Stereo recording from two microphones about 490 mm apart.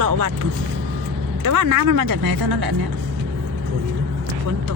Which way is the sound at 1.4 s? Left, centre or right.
Right.